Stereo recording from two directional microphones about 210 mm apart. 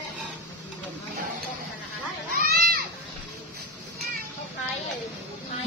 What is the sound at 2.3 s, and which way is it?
Children playing, 45° right (ahead or behind).